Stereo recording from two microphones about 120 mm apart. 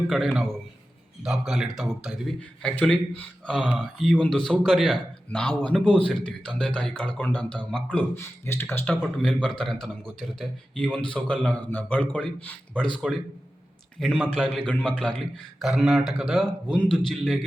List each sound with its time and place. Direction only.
0.1 s a man's voice: centre (ahead or behind); by 8.6 s 20° left (ahead or behind)
9.0 s a man's voice: 5° left (ahead or behind)
14.0 s a man's voice: 5° left (ahead or behind)